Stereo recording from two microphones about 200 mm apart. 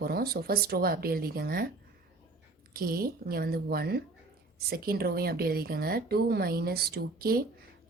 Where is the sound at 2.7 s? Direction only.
45° right (ahead or behind).